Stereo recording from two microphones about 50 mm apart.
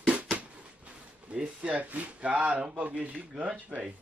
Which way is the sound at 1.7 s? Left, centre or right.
Right.